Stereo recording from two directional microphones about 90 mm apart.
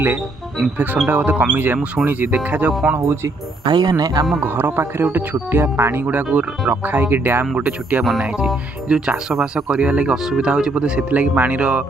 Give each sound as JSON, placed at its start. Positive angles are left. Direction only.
{"t": 1.0, "sound": "speech", "side_deg": -20}
{"t": 3.6, "sound": "speech", "side_deg": -50}
{"t": 4.4, "sound": "speech", "side_deg": -25}